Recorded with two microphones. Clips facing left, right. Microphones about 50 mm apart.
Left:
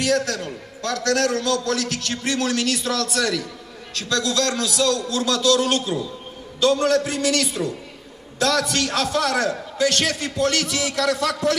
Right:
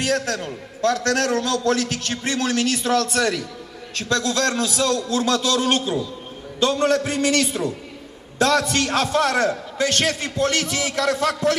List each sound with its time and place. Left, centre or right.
0.0 s a man's voice: right